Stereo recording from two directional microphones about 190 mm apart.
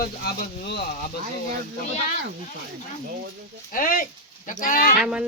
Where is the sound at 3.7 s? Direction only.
45° left (ahead or behind).